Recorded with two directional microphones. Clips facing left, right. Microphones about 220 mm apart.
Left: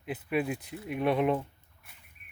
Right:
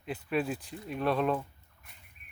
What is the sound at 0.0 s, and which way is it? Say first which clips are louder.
Speech: left 1 dB; 5° left (ahead or behind).